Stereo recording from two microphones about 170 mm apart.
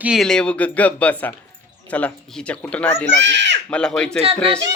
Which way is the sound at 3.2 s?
90° right.